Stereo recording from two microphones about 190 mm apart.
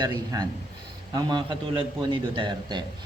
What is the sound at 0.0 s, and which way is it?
A man's voice, 20° right (ahead or behind).